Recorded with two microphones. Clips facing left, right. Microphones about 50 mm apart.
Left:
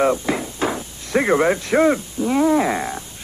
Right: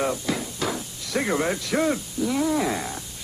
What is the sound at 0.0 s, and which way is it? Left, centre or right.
Speech, left.